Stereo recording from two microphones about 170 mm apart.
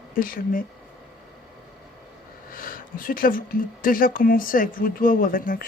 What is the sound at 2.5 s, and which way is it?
Speech, 55° left (ahead or behind).